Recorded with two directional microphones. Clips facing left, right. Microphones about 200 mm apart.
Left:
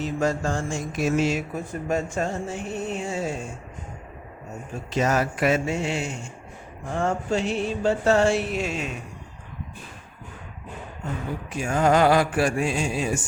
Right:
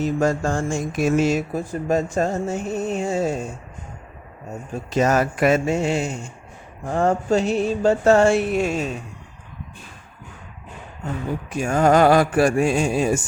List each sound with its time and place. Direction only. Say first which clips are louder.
0.0 s speech: right 4 dB; 45° right (ahead or behind)
4.9 s speech: right 4 dB; 45° right (ahead or behind)
11.5 s speech: right 4 dB; 45° right (ahead or behind)